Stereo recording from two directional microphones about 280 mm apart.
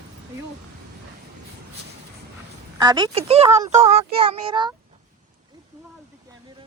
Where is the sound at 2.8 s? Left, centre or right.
Centre.